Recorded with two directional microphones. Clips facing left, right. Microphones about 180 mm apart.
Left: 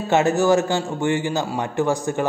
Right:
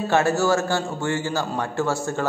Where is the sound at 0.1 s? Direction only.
20° left (ahead or behind).